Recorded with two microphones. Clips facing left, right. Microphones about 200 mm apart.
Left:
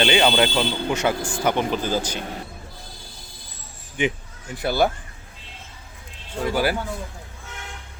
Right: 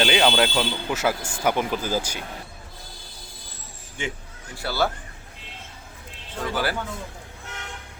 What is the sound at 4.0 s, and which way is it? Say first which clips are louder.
Speech: left 8 dB; 15° left (ahead or behind).